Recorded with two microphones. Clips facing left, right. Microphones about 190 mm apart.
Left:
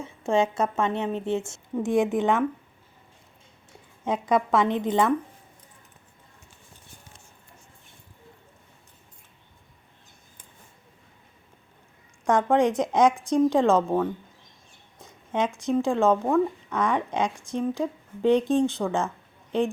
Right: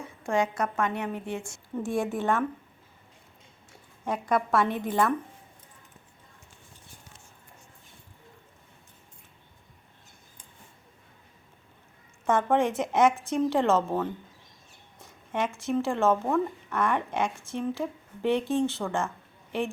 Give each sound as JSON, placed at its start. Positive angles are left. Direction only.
{"t": 0.0, "sound": "a woman's voice", "side_deg": 25}
{"t": 4.0, "sound": "a woman's voice", "side_deg": 20}
{"t": 12.2, "sound": "speech", "side_deg": 15}